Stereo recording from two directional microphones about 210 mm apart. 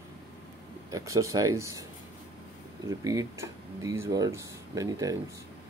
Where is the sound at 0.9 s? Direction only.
15° right (ahead or behind).